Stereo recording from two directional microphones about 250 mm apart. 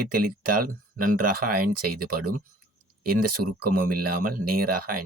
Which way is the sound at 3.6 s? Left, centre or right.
Right.